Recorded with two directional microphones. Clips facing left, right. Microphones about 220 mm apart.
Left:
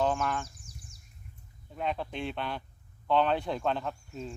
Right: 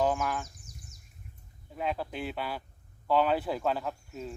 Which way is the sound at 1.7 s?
5° right (ahead or behind).